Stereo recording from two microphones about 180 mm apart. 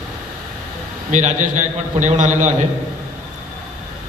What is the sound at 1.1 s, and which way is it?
Mantra, 40° right (ahead or behind).